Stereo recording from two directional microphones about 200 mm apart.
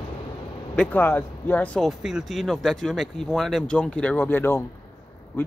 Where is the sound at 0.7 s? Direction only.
5° left (ahead or behind).